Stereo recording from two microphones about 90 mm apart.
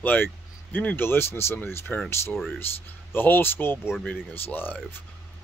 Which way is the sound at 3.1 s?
25° left (ahead or behind).